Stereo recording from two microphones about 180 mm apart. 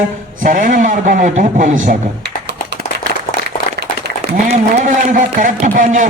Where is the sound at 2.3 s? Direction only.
70° right (ahead or behind).